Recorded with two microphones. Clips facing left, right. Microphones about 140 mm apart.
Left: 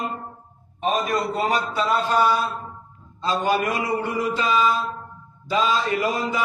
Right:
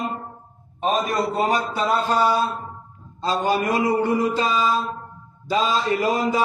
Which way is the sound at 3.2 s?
35° right (ahead or behind).